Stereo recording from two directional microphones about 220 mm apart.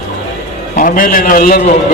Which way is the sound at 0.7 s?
40° left (ahead or behind).